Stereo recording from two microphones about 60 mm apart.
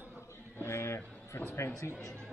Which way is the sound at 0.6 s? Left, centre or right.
Left.